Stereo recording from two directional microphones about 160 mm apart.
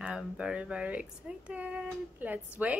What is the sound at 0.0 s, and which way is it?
A woman's voice, 5° right (ahead or behind).